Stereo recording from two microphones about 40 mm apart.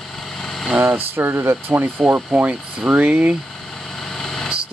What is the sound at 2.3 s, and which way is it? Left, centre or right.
Speech, centre.